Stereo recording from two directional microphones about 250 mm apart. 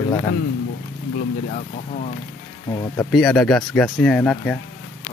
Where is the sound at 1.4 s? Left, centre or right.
Left.